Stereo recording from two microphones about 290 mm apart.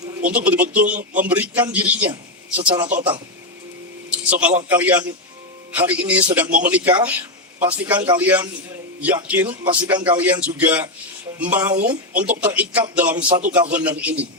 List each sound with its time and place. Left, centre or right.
0.0 s a sound: centre
0.3 s a man's voice: centre
0.9 s speech: right
1.2 s a man's voice: centre
4.1 s a man's voice: centre
13.2 s speech: centre
13.5 s a man's voice: centre